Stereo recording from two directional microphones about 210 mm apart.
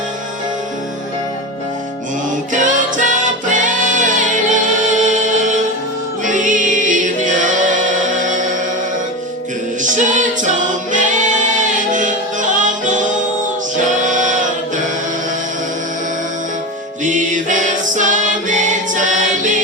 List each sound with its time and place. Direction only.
2.5 s music: 35° right (ahead or behind)
9.8 s music: 35° right (ahead or behind)
11.7 s music: 35° right (ahead or behind)
14.0 s choir: 35° right (ahead or behind)
17.0 s music: 35° right (ahead or behind)